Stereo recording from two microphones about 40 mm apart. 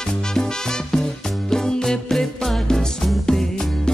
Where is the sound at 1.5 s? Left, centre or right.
Centre.